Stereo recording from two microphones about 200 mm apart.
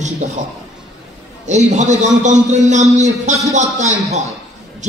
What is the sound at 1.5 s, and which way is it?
A man's voice, 35° right (ahead or behind).